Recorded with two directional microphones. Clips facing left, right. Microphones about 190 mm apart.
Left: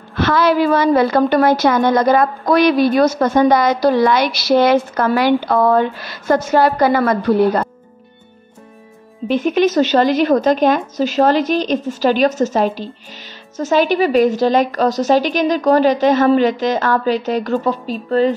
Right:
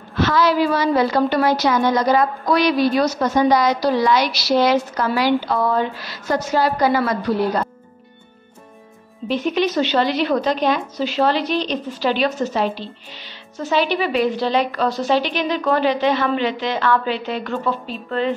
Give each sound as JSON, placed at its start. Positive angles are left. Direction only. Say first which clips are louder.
{"t": 0.1, "sound": "a woman's voice", "louder": "left 3 dB", "side_deg": 55}
{"t": 9.3, "sound": "a woman's voice", "louder": "left 5 dB", "side_deg": 50}